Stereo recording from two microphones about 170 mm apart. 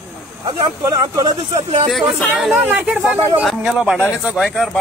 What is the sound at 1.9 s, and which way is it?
Speech, centre (ahead or behind).